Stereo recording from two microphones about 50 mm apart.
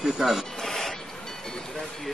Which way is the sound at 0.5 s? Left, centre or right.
Centre.